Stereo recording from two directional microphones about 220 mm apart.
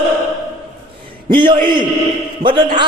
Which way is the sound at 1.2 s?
20° right (ahead or behind).